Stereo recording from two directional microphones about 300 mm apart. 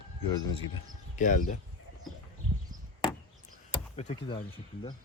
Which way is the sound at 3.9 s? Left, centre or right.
Centre.